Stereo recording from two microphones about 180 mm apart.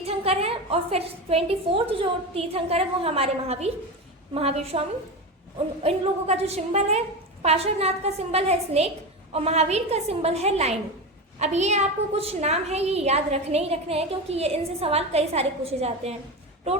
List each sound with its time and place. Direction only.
0.0 s a woman's voice: 35° right (ahead or behind)